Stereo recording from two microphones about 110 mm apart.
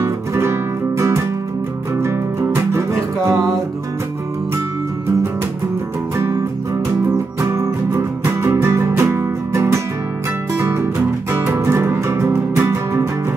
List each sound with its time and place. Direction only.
0.0 s music: 25° right (ahead or behind)
7.5 s music: 25° right (ahead or behind)
11.3 s music: 25° right (ahead or behind)